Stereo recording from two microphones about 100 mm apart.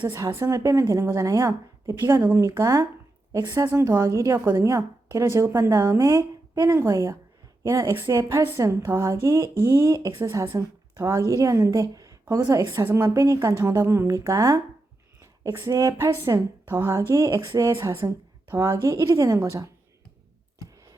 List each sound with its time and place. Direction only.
0.3 s a woman's voice: 30° right (ahead or behind)
2.6 s a woman's voice: 35° right (ahead or behind)
3.7 s a woman's voice: 25° right (ahead or behind)
12.7 s a woman's voice: 25° right (ahead or behind)